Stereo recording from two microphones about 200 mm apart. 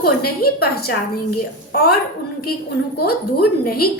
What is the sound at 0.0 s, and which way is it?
Speech, 50° left (ahead or behind).